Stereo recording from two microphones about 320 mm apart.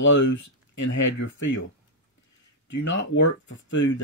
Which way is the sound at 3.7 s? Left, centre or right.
Left.